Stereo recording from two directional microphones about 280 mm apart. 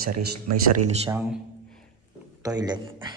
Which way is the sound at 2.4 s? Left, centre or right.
Centre.